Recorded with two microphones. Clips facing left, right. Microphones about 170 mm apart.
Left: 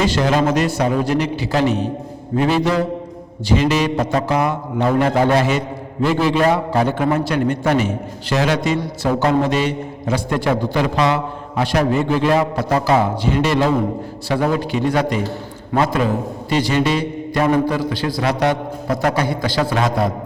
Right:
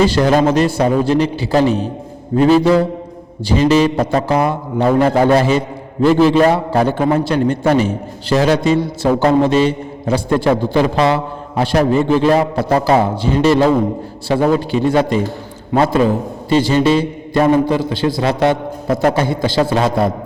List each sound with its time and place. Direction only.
0.0 s a man's voice: 35° right (ahead or behind)